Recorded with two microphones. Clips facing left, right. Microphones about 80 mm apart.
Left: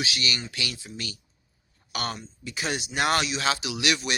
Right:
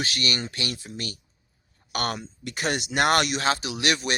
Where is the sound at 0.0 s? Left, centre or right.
Right.